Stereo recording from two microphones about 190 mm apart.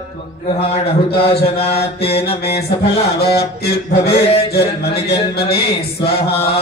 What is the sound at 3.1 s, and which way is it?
Speech, 55° left (ahead or behind).